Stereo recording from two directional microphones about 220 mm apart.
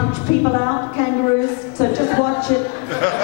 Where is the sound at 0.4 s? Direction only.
20° left (ahead or behind).